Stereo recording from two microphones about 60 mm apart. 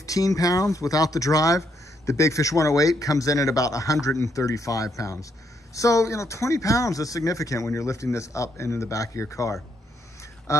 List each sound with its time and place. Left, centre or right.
0.0 s speech: left
2.0 s speech: left